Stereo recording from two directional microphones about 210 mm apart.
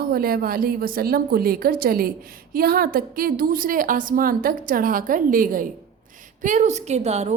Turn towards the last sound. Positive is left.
turn(degrees=-30)  # may be behind; listen again after turning